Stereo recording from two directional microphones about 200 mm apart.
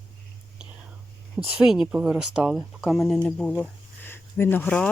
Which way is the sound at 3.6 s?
10° left (ahead or behind).